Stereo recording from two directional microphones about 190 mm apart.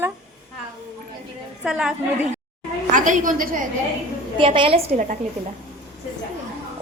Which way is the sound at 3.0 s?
45° right (ahead or behind).